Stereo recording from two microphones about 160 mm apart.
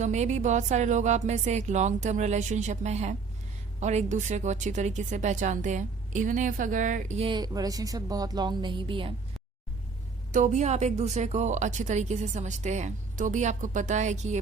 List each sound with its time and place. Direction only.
0.0 s a woman's voice: 45° right (ahead or behind)
7.2 s a woman's voice: 30° right (ahead or behind)
10.3 s a woman's voice: 50° right (ahead or behind)